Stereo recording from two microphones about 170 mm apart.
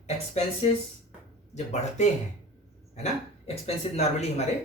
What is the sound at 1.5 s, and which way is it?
Speech, 40° left (ahead or behind).